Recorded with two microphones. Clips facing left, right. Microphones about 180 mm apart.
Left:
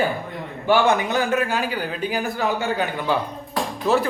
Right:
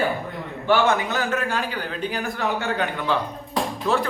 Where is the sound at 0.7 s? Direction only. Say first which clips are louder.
Left 2 dB; 15° left (ahead or behind).